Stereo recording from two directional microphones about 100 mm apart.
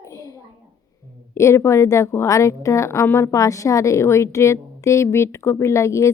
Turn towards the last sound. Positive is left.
turn(degrees=30)  # may be behind; listen again after turning